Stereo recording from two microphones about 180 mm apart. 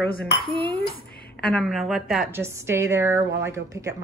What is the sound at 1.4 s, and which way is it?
Speech, centre (ahead or behind).